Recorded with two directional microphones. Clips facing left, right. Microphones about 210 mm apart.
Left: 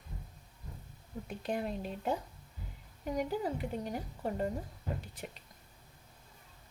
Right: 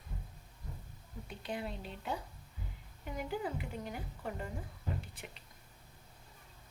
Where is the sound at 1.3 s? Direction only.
45° left (ahead or behind).